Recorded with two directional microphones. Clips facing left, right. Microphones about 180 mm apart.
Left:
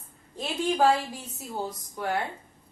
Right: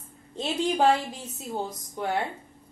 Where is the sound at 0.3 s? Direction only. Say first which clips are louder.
Right 1 dB; 20° right (ahead or behind).